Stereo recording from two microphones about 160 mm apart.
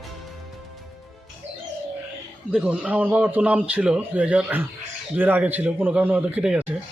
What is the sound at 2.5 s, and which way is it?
Speech, 10° right (ahead or behind).